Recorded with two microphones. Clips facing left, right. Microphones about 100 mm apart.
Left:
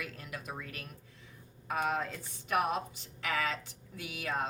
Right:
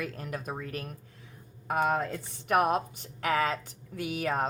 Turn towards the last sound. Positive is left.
turn(degrees=-50)  # may be behind; listen again after turning